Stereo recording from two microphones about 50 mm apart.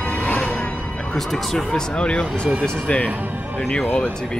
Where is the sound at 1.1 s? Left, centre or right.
Centre.